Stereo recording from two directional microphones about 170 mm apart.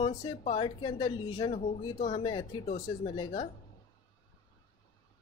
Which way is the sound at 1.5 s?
45° left (ahead or behind).